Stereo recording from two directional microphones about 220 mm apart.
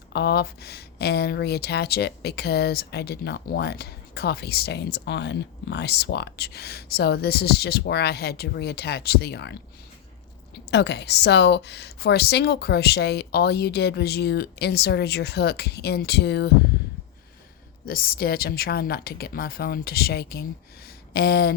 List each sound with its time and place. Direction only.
0.1 s speech: 50° left (ahead or behind)
10.7 s speech: 50° left (ahead or behind)
17.8 s speech: 40° left (ahead or behind)
21.1 s a sound: 45° left (ahead or behind)